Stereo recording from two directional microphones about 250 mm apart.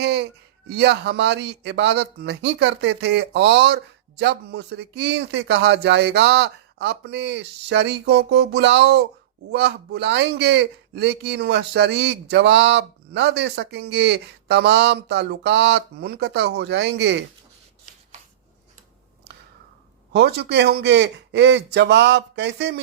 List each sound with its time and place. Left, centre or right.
0.0 s a sound: right
0.7 s a man's voice: right
20.1 s a man's voice: right